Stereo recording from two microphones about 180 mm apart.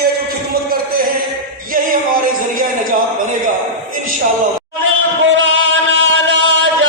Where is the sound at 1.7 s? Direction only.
55° right (ahead or behind).